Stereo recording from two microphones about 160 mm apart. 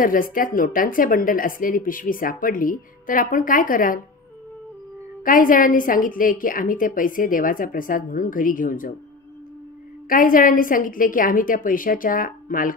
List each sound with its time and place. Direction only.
0.0 s a woman's voice: 60° left (ahead or behind)
5.2 s a woman's voice: 60° left (ahead or behind)
10.0 s a woman's voice: 60° left (ahead or behind)